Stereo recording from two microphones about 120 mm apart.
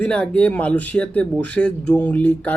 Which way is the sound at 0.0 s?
10° left (ahead or behind).